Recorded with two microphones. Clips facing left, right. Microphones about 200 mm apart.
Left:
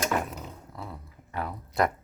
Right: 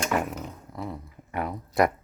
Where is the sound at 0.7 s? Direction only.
15° right (ahead or behind).